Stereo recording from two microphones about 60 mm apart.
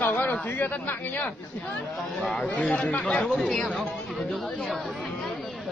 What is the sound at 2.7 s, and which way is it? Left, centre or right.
Speech, left.